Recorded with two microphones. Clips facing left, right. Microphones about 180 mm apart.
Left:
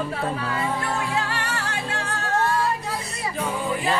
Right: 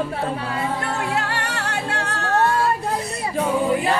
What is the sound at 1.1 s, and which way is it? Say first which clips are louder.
Music: right 2 dB; 70° right (ahead or behind).